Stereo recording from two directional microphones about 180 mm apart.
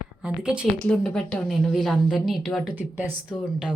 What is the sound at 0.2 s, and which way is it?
Speech, 5° right (ahead or behind).